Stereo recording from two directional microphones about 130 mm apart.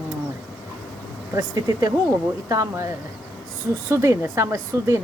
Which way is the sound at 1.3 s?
30° right (ahead or behind).